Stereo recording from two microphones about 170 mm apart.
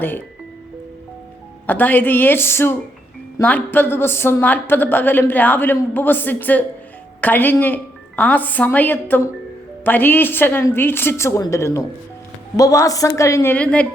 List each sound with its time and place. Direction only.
1.6 s a woman's voice: 10° left (ahead or behind)